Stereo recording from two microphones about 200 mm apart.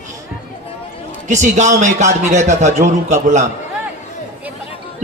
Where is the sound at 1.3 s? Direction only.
35° right (ahead or behind).